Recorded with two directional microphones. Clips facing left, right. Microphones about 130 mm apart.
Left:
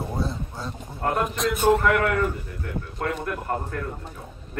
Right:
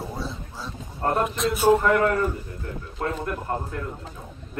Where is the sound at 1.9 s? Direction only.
30° right (ahead or behind).